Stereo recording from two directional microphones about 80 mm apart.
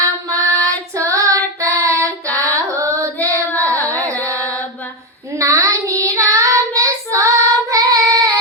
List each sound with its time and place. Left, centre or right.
0.0 s female singing: right
1.1 s child singing: right
5.4 s child singing: right